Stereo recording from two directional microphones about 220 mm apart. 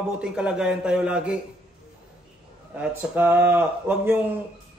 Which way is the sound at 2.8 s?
10° right (ahead or behind).